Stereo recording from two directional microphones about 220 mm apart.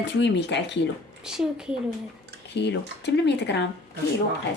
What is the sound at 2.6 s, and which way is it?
Speech, 50° left (ahead or behind).